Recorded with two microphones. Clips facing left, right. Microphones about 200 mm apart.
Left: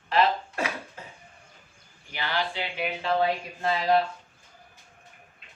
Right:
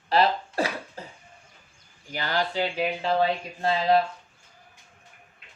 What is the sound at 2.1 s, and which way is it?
Speech, 40° right (ahead or behind).